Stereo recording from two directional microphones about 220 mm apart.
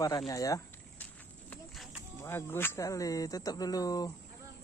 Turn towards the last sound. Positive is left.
turn(degrees=15)  # may be behind; listen again after turning